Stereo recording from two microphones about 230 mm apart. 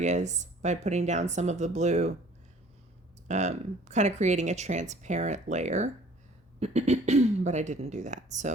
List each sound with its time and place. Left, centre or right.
0.0 s speech: right
3.2 s speech: right